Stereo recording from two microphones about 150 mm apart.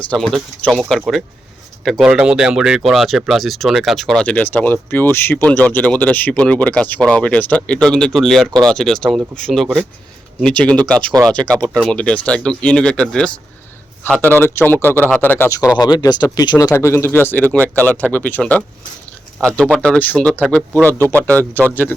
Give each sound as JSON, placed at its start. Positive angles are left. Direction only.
{"t": 0.1, "sound": "speech", "side_deg": 5}